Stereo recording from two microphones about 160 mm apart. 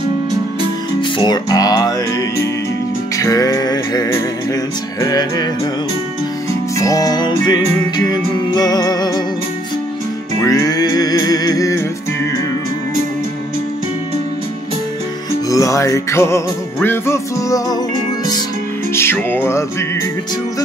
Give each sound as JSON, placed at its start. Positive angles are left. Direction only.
{"t": 1.1, "sound": "music", "side_deg": 25}
{"t": 6.8, "sound": "music", "side_deg": 20}
{"t": 10.4, "sound": "music", "side_deg": 20}
{"t": 15.5, "sound": "music", "side_deg": 20}
{"t": 18.9, "sound": "music", "side_deg": 15}